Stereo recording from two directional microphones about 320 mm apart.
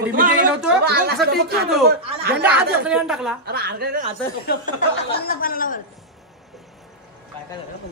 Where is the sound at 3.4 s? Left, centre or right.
Right.